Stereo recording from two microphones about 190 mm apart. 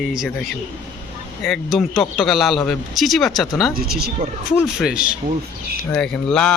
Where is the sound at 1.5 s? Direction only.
Centre (ahead or behind).